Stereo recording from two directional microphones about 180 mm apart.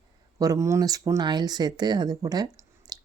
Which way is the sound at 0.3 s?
20° right (ahead or behind).